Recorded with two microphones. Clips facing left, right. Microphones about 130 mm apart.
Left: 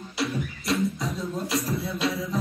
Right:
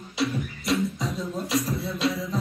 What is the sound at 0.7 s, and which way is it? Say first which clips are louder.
Beatboxing: even; centre (ahead or behind).